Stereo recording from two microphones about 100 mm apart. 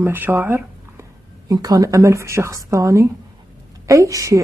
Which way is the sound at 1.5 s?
40° right (ahead or behind).